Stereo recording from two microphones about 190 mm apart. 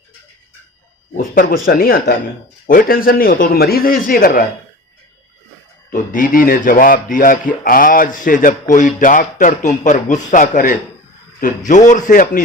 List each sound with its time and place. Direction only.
1.1 s speech: 45° left (ahead or behind)
5.9 s speech: 45° left (ahead or behind)